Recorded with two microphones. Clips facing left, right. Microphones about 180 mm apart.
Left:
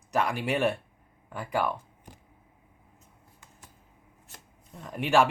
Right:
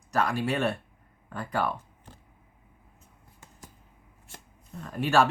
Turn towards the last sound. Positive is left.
turn(degrees=15)  # may be behind; listen again after turning